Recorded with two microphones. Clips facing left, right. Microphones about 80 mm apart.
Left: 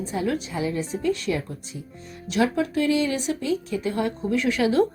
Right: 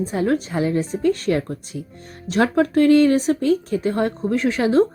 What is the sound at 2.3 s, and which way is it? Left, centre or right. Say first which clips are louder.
A woman's voice: right 5 dB; right.